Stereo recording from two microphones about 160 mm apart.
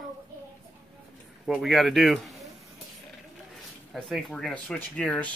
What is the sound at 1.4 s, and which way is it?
Speech, centre (ahead or behind).